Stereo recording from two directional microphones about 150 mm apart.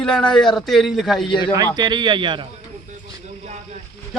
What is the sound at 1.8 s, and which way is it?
Speech, 30° right (ahead or behind).